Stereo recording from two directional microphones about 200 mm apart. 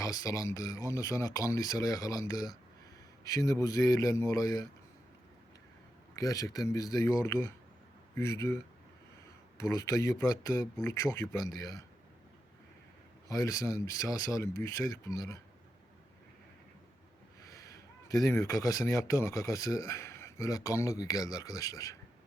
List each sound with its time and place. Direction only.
0.0 s speech: 15° left (ahead or behind)
6.1 s speech: 15° left (ahead or behind)
9.6 s speech: 15° left (ahead or behind)
13.2 s speech: 15° left (ahead or behind)
17.5 s speech: 15° left (ahead or behind)